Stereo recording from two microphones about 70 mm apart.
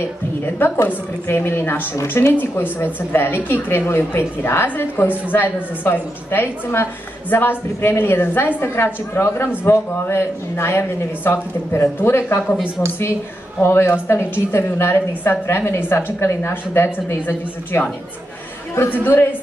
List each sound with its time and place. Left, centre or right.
0.5 s a woman's voice: left
13.6 s a woman's voice: left
18.9 s a woman's voice: left